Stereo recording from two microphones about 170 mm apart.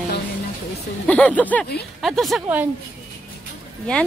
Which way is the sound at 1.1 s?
10° left (ahead or behind).